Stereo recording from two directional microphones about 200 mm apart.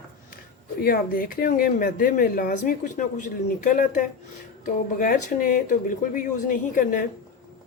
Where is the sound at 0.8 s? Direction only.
45° left (ahead or behind).